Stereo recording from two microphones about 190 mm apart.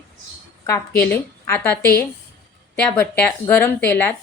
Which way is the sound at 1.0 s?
10° left (ahead or behind).